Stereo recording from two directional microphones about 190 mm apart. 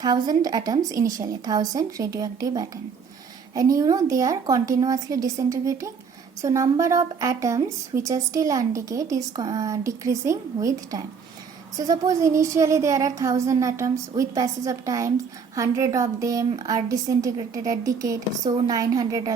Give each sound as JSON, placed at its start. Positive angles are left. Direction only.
{"t": 0.0, "sound": "a woman's voice", "side_deg": -20}